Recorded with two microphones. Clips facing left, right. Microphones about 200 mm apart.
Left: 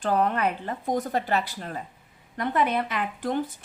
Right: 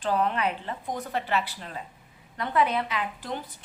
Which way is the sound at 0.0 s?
45° left (ahead or behind).